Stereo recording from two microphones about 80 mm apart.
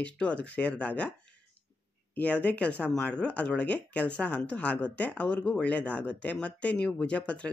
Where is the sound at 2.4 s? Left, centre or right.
Centre.